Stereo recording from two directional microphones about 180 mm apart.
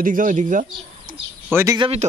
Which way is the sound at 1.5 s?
15° right (ahead or behind).